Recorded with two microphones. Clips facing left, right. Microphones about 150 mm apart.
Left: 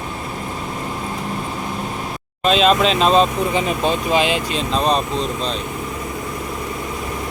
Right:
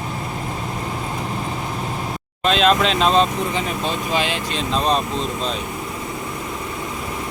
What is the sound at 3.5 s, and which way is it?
Speech, 15° left (ahead or behind).